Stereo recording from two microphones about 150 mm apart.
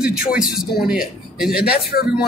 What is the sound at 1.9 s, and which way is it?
Speech, 90° left.